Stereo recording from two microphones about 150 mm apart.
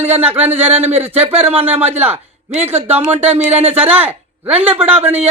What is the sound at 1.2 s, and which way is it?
Speech, 40° right (ahead or behind).